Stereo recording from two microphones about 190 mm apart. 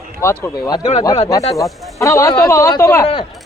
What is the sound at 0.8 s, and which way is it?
Speech, 30° left (ahead or behind).